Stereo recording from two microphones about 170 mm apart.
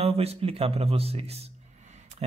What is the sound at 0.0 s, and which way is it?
Speech, 35° right (ahead or behind).